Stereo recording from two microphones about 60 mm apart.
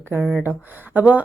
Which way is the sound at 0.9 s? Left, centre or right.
Right.